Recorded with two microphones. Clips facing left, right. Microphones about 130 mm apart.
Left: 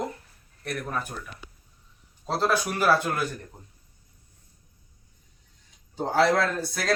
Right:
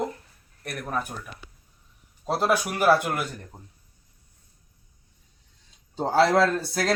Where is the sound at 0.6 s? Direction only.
15° right (ahead or behind).